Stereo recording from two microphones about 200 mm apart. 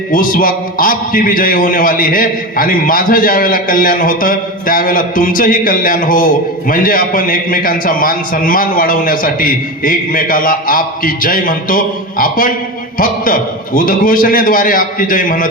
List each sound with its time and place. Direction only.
0.1 s a man's voice: 45° left (ahead or behind)